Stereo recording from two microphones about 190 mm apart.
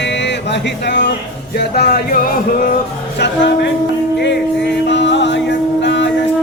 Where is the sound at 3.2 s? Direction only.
65° left (ahead or behind).